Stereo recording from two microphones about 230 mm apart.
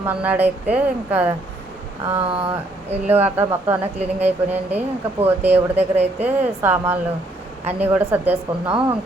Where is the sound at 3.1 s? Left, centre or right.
Centre.